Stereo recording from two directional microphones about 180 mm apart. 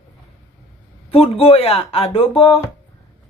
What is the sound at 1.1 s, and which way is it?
Chopping, 35° left (ahead or behind).